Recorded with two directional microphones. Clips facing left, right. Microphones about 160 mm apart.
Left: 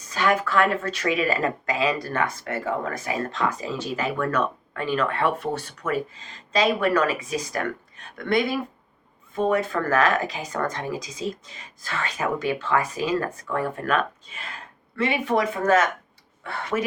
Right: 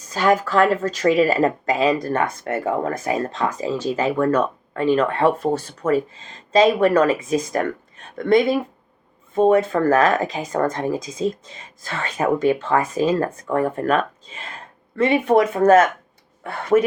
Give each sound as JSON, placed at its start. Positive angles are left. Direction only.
{"t": 0.1, "sound": "speech", "side_deg": -40}
{"t": 9.3, "sound": "speech", "side_deg": -35}